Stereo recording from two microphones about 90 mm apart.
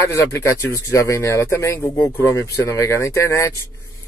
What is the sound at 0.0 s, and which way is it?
Speech, 30° left (ahead or behind).